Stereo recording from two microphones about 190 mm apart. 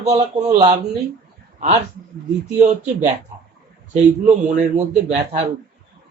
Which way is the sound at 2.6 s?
35° right (ahead or behind).